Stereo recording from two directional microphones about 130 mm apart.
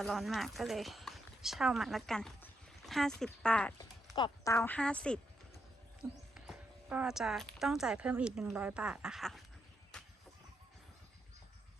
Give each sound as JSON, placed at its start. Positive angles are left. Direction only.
{"t": 0.0, "sound": "a woman's voice", "side_deg": 0}
{"t": 4.1, "sound": "speech", "side_deg": 35}
{"t": 4.5, "sound": "a woman's voice", "side_deg": 15}
{"t": 6.3, "sound": "speech", "side_deg": -5}
{"t": 9.9, "sound": "a sound", "side_deg": 5}